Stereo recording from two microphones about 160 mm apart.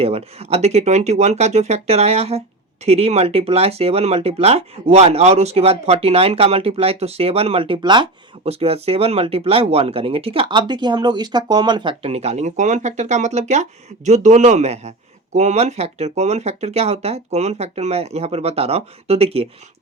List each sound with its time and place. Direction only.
0.0 s speech: 40° right (ahead or behind)
8.4 s speech: 40° right (ahead or behind)